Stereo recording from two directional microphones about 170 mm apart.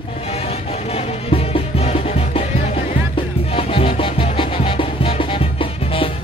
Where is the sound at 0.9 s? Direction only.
35° left (ahead or behind).